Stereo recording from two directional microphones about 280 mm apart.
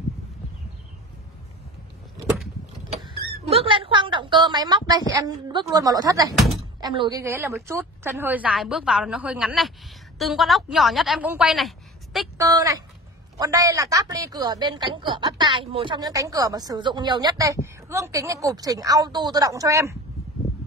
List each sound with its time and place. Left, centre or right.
3.4 s a sound: centre
6.5 s a woman's voice: centre
12.4 s a woman's voice: centre